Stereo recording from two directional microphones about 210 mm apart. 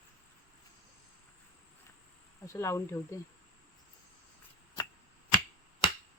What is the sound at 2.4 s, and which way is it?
Speech, 15° left (ahead or behind).